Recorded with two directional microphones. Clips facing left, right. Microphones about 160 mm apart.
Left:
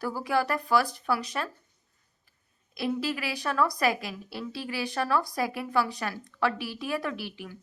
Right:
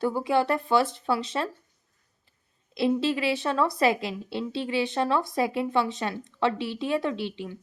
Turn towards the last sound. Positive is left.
turn(degrees=-25)  # may be behind; listen again after turning